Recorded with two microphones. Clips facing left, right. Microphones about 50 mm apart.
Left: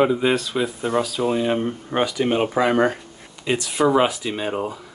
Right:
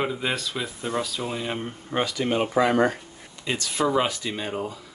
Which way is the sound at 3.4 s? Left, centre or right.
Centre.